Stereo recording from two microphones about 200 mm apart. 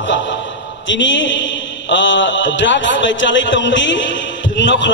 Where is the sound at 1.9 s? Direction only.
65° left (ahead or behind).